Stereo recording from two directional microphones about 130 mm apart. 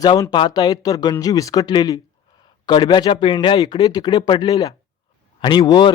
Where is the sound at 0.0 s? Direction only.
30° left (ahead or behind).